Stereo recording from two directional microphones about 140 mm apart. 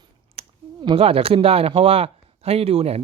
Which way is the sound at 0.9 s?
45° right (ahead or behind).